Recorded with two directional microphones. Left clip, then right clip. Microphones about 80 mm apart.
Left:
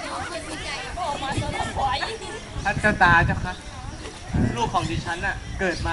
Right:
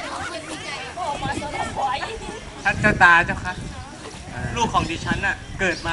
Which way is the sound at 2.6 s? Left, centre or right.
Right.